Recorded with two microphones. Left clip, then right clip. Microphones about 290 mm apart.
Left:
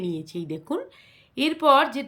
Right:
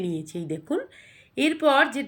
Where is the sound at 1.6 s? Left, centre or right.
Centre.